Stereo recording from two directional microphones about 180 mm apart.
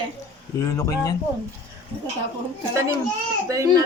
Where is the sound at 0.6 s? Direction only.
15° left (ahead or behind).